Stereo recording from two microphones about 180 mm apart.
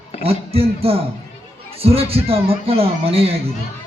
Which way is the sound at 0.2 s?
35° right (ahead or behind).